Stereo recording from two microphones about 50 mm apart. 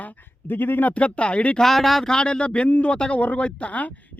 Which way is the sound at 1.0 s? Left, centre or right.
Left.